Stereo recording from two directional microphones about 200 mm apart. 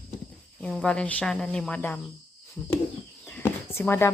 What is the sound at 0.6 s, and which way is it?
Speech, 5° left (ahead or behind).